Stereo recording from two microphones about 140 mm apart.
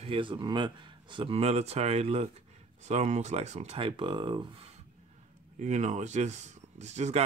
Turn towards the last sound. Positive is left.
turn(degrees=-55)  # may be behind; listen again after turning